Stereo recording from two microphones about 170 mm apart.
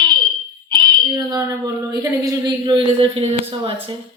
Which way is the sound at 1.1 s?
20° right (ahead or behind).